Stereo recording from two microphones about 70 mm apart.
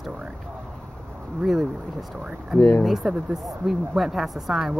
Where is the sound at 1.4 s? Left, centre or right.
Centre.